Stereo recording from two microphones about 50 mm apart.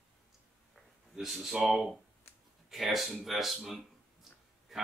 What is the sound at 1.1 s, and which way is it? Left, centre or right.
Speech, centre.